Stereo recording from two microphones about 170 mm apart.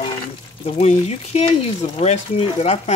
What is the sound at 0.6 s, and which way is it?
Speech, 40° left (ahead or behind).